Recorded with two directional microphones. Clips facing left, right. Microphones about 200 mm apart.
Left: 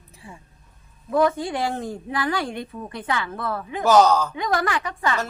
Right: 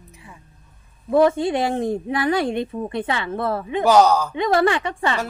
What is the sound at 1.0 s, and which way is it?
Speech, 25° right (ahead or behind).